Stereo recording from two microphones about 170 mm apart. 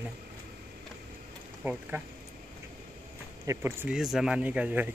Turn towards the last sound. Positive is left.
turn(degrees=-10)  # may be behind; listen again after turning